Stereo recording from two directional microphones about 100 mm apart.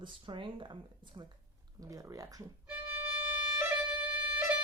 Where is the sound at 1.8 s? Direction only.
35° right (ahead or behind).